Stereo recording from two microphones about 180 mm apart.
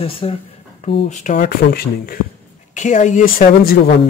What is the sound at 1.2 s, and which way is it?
Speech, 50° left (ahead or behind).